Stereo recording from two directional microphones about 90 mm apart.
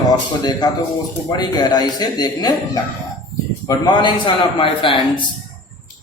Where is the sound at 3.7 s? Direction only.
35° left (ahead or behind).